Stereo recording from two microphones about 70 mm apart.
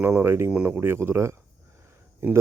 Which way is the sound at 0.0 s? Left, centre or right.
Right.